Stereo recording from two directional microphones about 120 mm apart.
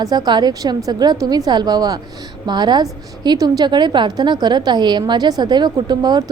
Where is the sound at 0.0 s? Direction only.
30° right (ahead or behind).